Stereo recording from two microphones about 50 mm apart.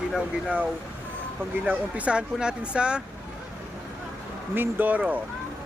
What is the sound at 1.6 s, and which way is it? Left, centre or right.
Speech, right.